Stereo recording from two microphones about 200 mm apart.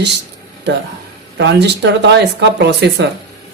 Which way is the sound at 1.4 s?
60° right (ahead or behind).